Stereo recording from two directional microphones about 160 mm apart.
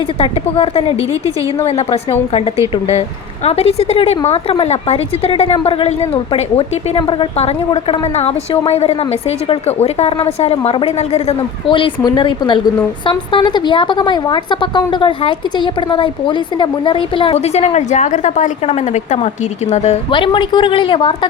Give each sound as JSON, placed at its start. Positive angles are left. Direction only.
{"t": 0.2, "sound": "a woman's voice", "side_deg": 35}
{"t": 20.1, "sound": "a woman's voice", "side_deg": 30}